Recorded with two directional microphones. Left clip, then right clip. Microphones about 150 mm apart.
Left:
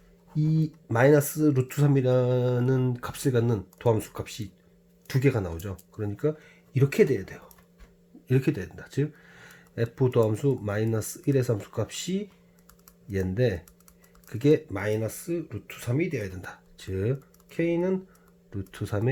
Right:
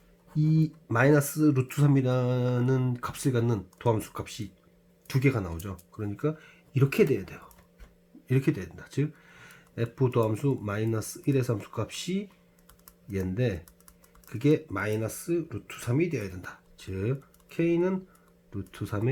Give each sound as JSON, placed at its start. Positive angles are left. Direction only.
{"t": 0.3, "sound": "speech", "side_deg": 25}